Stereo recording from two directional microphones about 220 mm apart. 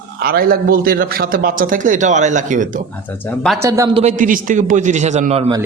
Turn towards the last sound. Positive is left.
turn(degrees=-25)  # may be behind; listen again after turning